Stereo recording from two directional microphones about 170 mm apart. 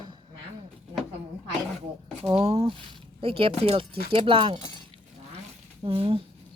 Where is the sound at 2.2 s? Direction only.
35° right (ahead or behind).